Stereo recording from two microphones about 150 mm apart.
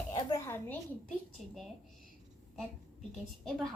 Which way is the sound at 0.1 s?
25° left (ahead or behind).